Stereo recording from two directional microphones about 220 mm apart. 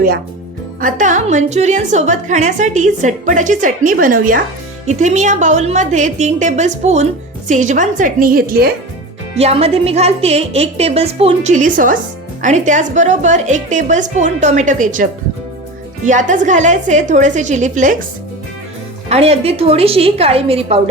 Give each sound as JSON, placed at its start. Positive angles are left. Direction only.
{"t": 0.8, "sound": "a woman's voice", "side_deg": -35}
{"t": 9.4, "sound": "a woman's voice", "side_deg": -30}
{"t": 19.0, "sound": "a woman's voice", "side_deg": -30}